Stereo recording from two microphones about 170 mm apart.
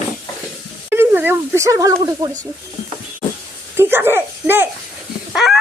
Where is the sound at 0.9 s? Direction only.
10° right (ahead or behind).